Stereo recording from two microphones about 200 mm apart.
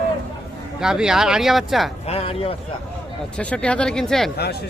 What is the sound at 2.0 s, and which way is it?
Speech, 30° left (ahead or behind).